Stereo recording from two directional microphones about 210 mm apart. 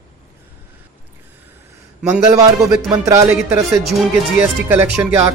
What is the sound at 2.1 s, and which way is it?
Speech, 15° right (ahead or behind).